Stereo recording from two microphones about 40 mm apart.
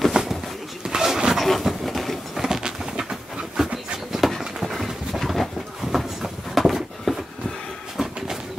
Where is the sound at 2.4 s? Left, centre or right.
Centre.